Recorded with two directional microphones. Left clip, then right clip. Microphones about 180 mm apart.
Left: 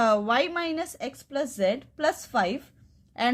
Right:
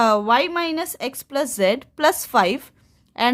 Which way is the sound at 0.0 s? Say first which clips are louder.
Right 6 dB; 25° right (ahead or behind).